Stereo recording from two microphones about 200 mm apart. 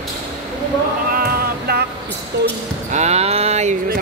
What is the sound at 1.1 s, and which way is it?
Cat, 50° right (ahead or behind).